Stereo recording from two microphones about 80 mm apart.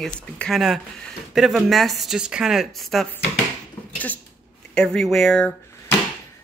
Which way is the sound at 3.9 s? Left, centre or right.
Centre.